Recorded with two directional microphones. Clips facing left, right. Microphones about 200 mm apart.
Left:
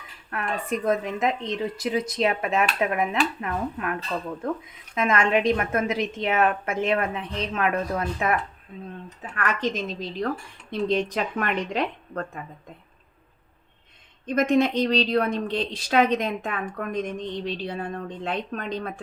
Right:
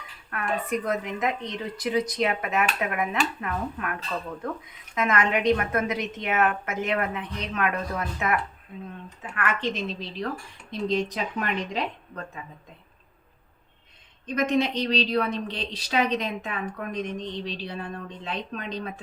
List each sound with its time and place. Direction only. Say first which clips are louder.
0.3 s a woman's voice: even; 30° left (ahead or behind)
4.9 s a woman's voice: left 3 dB; 30° left (ahead or behind); by 10.1 s 45° left (ahead or behind)
10.7 s speech: left 2 dB; 55° left (ahead or behind)
14.3 s a woman's voice: left 3 dB; 50° left (ahead or behind)